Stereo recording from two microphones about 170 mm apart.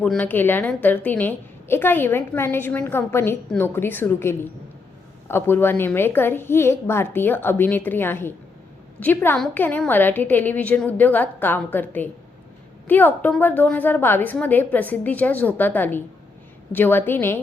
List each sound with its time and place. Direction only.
0.0 s a woman's voice: 10° left (ahead or behind)